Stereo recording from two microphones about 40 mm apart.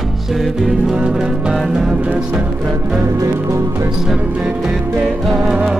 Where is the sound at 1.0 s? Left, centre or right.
Right.